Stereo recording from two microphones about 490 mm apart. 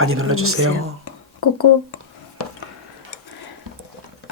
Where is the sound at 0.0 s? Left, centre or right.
Right.